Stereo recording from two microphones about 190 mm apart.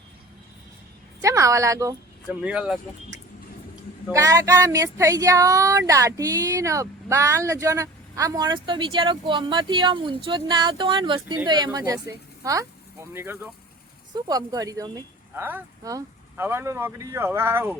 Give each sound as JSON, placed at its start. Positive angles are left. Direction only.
{"t": 1.2, "sound": "a woman's voice", "side_deg": -15}
{"t": 2.4, "sound": "speech", "side_deg": -5}
{"t": 4.1, "sound": "speech", "side_deg": -15}